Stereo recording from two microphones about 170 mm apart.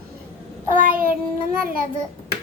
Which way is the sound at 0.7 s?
55° right (ahead or behind).